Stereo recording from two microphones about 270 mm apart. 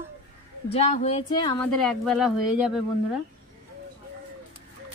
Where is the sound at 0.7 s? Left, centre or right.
Left.